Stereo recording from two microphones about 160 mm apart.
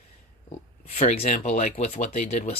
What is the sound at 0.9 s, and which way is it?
Speech, 40° left (ahead or behind).